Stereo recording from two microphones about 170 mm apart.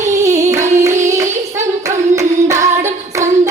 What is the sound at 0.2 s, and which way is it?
Singing, 20° right (ahead or behind).